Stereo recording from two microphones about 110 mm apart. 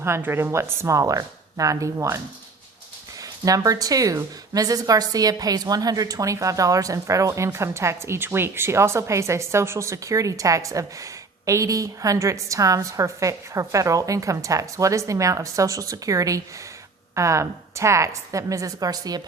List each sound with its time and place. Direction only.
0.0 s a woman's voice: 20° right (ahead or behind)